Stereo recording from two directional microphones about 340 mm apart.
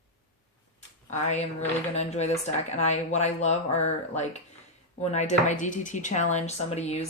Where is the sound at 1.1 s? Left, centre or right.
Left.